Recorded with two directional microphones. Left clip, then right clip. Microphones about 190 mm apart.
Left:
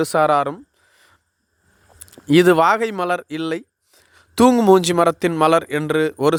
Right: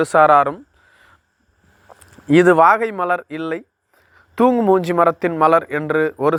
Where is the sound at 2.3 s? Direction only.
35° left (ahead or behind).